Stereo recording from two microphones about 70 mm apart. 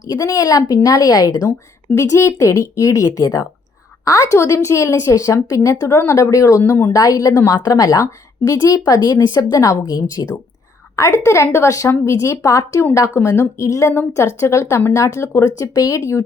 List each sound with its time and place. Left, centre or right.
0.0 s a woman's voice: left
2.0 s a woman's voice: left
8.5 s a woman's voice: left
11.0 s a woman's voice: left